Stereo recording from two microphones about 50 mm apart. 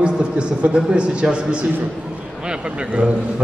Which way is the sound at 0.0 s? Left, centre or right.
Right.